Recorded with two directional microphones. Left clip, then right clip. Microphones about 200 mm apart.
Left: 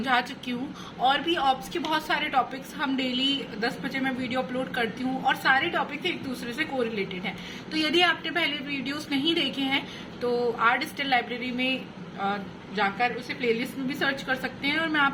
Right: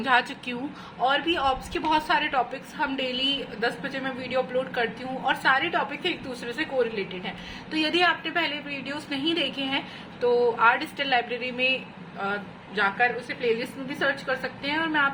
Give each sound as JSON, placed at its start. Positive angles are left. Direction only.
{"t": 0.0, "sound": "a woman's voice", "side_deg": -20}